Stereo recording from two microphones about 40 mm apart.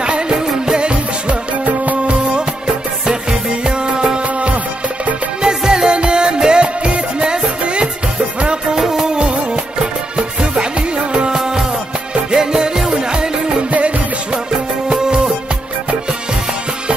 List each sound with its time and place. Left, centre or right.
0.0 s music: right
3.1 s music: right
4.2 s music: right
5.4 s music: centre
8.7 s music: centre
9.1 s music of bollywood: right
10.1 s music: right
13.7 s music: right
14.9 s music: centre